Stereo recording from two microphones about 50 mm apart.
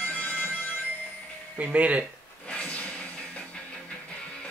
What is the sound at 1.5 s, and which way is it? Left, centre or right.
Speech, right.